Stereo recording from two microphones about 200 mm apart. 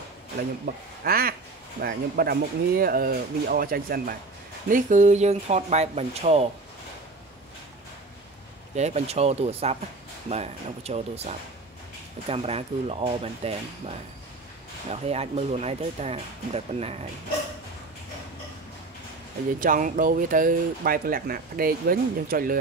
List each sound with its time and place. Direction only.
0.7 s speech: 50° right (ahead or behind); by 6.5 s 30° right (ahead or behind)
8.7 s speech: 35° right (ahead or behind)
19.6 s speech: 45° right (ahead or behind)